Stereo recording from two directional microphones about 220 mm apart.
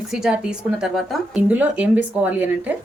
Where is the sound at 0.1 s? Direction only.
Centre (ahead or behind).